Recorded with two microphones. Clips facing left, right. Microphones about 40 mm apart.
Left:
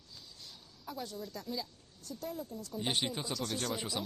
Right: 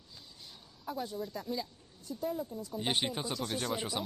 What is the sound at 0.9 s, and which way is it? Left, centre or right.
Speech, centre.